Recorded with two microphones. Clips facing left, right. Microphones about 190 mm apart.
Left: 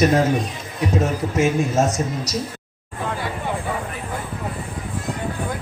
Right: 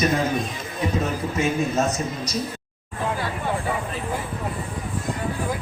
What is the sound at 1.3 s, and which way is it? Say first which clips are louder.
A man's voice: left 4 dB; 80° left.